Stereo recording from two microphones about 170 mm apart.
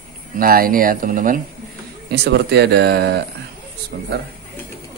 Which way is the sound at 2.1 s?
80° right.